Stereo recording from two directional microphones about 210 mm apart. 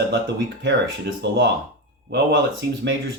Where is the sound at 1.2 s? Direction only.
55° right (ahead or behind).